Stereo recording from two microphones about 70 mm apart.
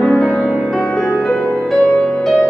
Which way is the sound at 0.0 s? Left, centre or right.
Centre.